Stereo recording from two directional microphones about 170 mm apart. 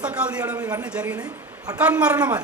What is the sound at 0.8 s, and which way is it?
A man's voice, 5° right (ahead or behind).